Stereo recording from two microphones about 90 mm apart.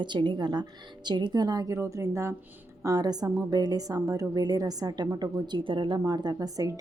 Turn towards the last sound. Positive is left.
turn(degrees=-40)  # may be behind; listen again after turning